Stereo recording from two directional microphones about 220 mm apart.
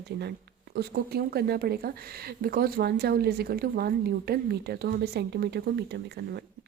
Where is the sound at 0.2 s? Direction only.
45° right (ahead or behind).